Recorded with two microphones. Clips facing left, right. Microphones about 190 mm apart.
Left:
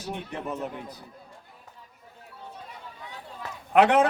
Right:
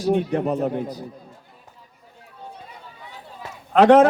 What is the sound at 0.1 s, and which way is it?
Speech, 50° right (ahead or behind).